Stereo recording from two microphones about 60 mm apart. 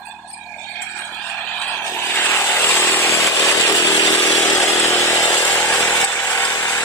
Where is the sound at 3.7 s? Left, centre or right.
Left.